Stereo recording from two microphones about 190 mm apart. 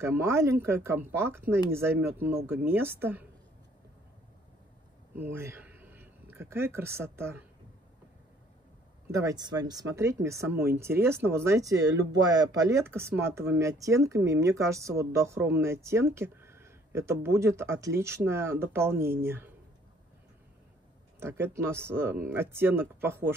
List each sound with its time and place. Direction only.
0.0 s speech: 15° right (ahead or behind)
5.1 s speech: 10° right (ahead or behind)
9.1 s speech: 20° right (ahead or behind)
21.2 s speech: 15° right (ahead or behind)